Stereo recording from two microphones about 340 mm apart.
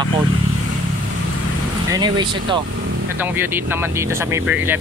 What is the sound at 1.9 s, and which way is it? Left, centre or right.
Speech, centre.